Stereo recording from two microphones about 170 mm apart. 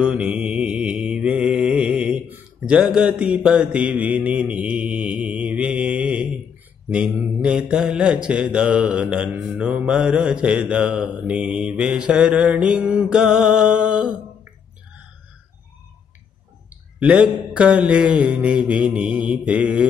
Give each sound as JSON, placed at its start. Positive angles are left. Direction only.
{"t": 0.0, "sound": "mantra", "side_deg": -5}
{"t": 17.0, "sound": "mantra", "side_deg": -5}